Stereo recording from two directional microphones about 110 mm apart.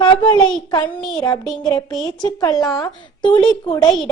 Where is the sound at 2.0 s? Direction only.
35° left (ahead or behind).